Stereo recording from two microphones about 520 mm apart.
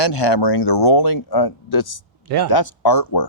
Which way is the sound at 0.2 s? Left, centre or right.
Left.